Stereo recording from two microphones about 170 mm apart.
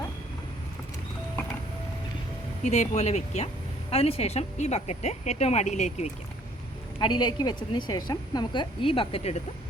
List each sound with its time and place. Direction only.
2.6 s speech: 40° left (ahead or behind)
7.0 s a woman's voice: 25° left (ahead or behind)